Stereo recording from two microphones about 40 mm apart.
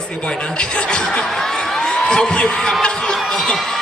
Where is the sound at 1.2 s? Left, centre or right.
Centre.